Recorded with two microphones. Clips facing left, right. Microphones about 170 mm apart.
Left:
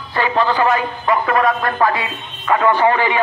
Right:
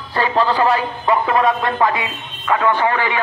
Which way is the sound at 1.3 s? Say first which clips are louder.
Even; 25° right (ahead or behind).